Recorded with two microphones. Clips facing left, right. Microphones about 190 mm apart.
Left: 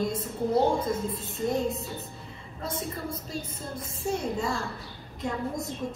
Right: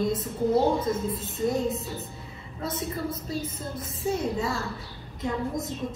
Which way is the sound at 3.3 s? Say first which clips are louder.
Right 3 dB; 5° right (ahead or behind).